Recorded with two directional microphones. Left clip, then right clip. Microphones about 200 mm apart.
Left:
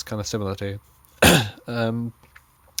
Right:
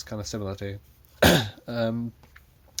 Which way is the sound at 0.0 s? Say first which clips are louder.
Left 6 dB; 45° left (ahead or behind).